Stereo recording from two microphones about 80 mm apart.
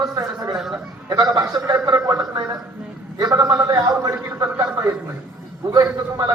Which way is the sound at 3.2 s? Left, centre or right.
Right.